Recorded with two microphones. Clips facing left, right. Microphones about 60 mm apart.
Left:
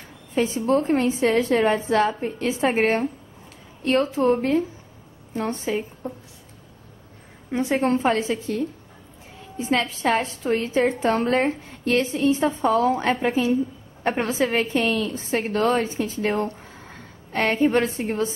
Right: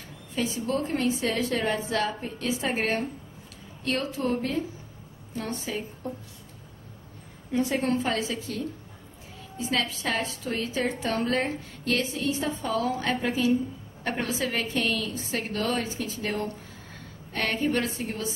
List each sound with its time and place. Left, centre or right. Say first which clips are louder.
0.3 s a woman's voice: left 7 dB; left
7.5 s a woman's voice: left 4 dB; left